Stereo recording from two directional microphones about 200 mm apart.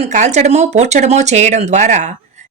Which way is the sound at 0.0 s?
35° right (ahead or behind).